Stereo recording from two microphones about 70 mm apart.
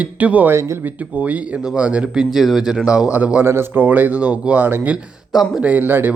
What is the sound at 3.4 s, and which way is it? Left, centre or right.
Speech, right.